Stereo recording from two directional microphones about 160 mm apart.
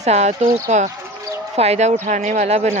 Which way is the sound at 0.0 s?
45° right (ahead or behind).